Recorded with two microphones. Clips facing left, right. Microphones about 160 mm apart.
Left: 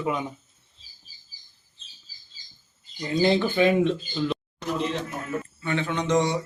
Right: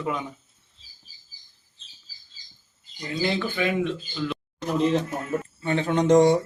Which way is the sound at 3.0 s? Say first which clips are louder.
Left 5 dB; 30° left (ahead or behind).